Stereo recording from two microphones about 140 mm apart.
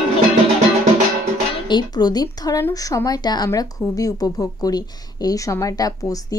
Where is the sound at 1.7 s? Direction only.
30° left (ahead or behind).